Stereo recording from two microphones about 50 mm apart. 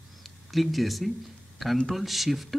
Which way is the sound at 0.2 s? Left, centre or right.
Centre.